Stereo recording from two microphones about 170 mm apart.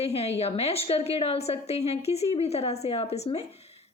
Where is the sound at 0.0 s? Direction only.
35° left (ahead or behind).